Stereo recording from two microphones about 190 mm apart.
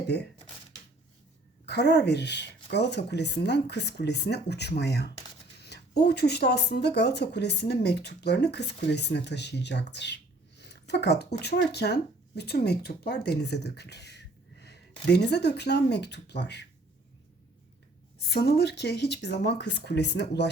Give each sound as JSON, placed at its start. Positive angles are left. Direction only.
{"t": 1.6, "sound": "speech", "side_deg": 60}
{"t": 18.2, "sound": "speech", "side_deg": 55}